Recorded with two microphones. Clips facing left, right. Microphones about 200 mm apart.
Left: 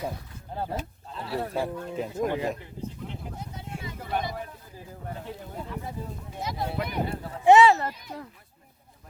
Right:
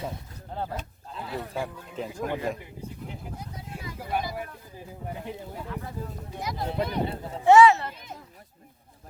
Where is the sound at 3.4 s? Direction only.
25° left (ahead or behind).